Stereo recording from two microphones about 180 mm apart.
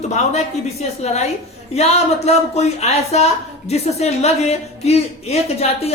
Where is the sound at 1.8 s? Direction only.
35° left (ahead or behind).